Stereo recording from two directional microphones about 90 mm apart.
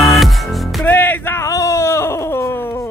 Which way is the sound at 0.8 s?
20° left (ahead or behind).